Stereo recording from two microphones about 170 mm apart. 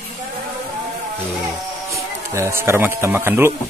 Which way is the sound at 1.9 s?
15° right (ahead or behind).